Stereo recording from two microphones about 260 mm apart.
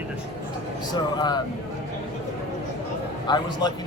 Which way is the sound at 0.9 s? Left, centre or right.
Centre.